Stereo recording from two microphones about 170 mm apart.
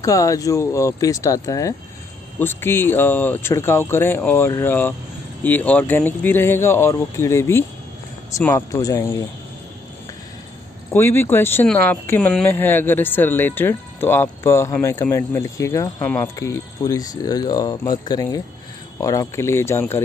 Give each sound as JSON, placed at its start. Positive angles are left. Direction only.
{"t": 0.0, "sound": "speech", "side_deg": 20}
{"t": 10.9, "sound": "speech", "side_deg": 15}